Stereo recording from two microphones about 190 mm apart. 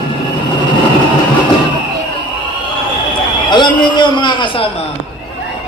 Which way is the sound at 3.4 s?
25° left (ahead or behind).